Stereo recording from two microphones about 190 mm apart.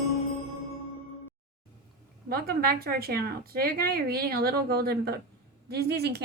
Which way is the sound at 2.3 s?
55° right (ahead or behind).